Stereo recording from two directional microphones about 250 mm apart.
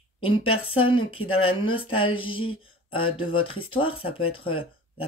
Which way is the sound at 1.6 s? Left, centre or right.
Left.